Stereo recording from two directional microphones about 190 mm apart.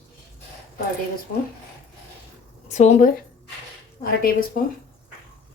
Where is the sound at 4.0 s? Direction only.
50° left (ahead or behind).